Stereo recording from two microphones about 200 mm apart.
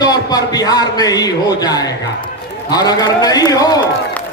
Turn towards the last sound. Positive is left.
turn(degrees=20)  # may be behind; listen again after turning